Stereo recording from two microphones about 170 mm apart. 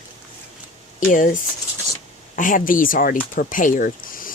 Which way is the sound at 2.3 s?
50° left (ahead or behind).